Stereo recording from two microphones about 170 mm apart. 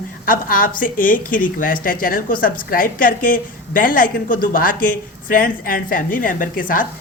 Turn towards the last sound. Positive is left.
turn(degrees=55)  # may be behind; listen again after turning